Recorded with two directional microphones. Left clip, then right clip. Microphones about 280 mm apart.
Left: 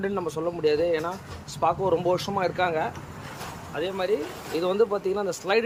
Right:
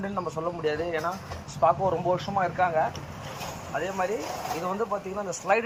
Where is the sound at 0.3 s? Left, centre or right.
Centre.